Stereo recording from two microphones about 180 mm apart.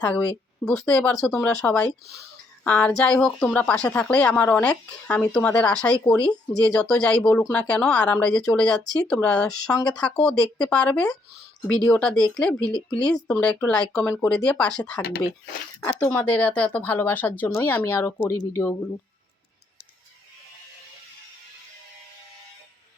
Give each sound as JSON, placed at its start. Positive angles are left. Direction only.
{"t": 0.0, "sound": "speech", "side_deg": 5}
{"t": 16.0, "sound": "speech", "side_deg": 10}